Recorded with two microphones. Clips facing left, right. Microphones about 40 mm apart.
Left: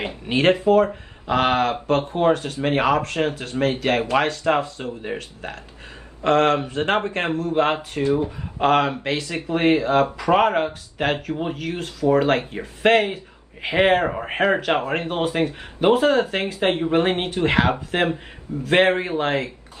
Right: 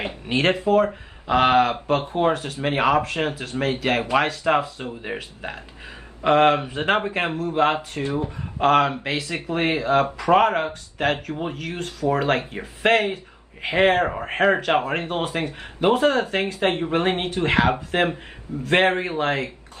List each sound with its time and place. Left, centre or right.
0.3 s speech: centre